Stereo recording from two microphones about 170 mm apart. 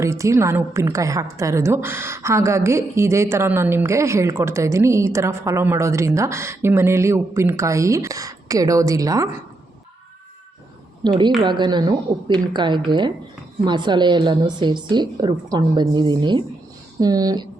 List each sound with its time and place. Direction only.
0.0 s a woman's voice: 15° right (ahead or behind)
11.0 s a woman's voice: 25° right (ahead or behind)